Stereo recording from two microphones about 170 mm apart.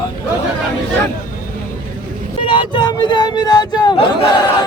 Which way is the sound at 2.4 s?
25° left (ahead or behind).